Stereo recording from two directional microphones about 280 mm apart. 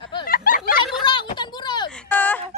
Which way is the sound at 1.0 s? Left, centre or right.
Centre.